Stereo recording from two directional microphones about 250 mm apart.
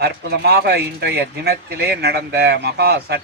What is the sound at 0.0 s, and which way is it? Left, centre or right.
Speech, right.